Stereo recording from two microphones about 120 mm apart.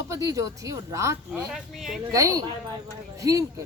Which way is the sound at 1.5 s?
Centre (ahead or behind).